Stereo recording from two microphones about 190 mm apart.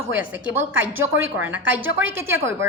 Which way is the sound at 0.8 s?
10° right (ahead or behind).